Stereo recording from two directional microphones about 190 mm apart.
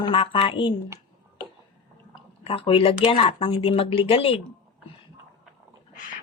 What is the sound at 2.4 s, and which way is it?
A woman's voice, 30° left (ahead or behind).